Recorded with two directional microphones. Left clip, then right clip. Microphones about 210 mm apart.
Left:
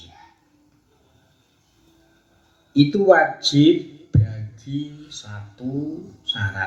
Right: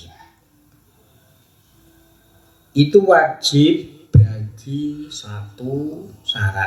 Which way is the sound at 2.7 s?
50° right (ahead or behind).